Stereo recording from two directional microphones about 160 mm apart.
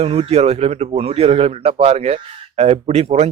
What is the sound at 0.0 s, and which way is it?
Speech, 40° right (ahead or behind).